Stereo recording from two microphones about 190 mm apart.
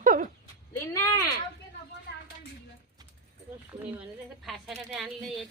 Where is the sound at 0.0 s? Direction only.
45° right (ahead or behind).